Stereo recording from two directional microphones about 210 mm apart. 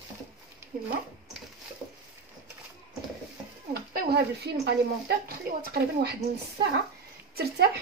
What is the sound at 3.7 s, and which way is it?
Speech, 45° right (ahead or behind).